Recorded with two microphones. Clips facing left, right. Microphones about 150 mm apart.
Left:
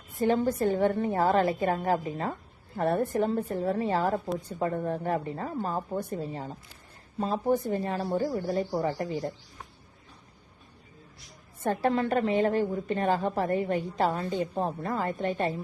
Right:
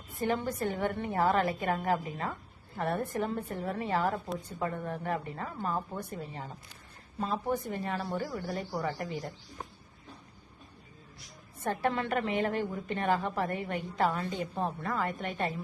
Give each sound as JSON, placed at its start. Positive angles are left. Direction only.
{"t": 0.2, "sound": "a woman's voice", "side_deg": 30}
{"t": 11.6, "sound": "a woman's voice", "side_deg": 30}